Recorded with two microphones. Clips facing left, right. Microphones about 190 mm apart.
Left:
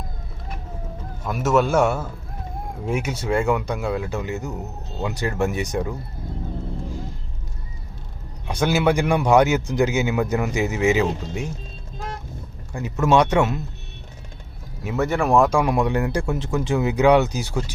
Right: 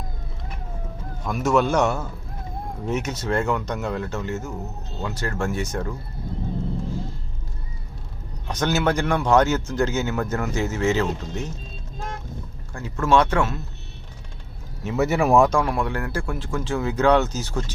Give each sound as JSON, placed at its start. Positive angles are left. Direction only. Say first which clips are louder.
{"t": 1.2, "sound": "a man's voice", "louder": "left 1 dB", "side_deg": 5}
{"t": 8.4, "sound": "a man's voice", "louder": "left 3 dB", "side_deg": 10}
{"t": 12.7, "sound": "a man's voice", "louder": "left 2 dB", "side_deg": 15}
{"t": 14.9, "sound": "a man's voice", "louder": "right 1 dB", "side_deg": -5}
{"t": 15.4, "sound": "a man's voice", "louder": "left 3 dB", "side_deg": 15}